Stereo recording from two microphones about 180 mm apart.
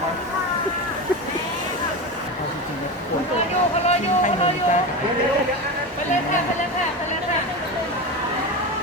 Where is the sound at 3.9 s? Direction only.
40° left (ahead or behind).